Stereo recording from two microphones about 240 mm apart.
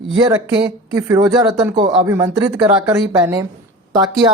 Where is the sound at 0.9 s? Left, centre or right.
Centre.